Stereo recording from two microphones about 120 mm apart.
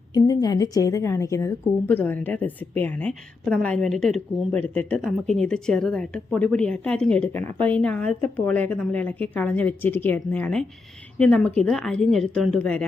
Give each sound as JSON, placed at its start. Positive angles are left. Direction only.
{"t": 0.1, "sound": "a woman's voice", "side_deg": 35}